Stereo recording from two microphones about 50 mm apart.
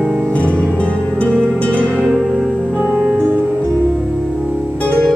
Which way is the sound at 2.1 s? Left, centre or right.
Centre.